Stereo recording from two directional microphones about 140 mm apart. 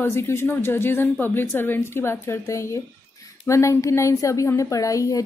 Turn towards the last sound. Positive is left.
turn(degrees=25)  # may be behind; listen again after turning